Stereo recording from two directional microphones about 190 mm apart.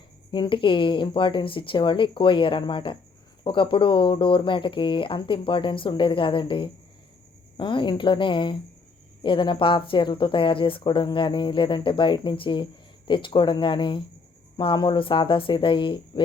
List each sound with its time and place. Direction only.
0.3 s speech: 25° left (ahead or behind)